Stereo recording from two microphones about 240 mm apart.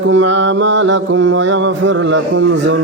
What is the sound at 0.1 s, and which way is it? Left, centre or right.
Mantra, right.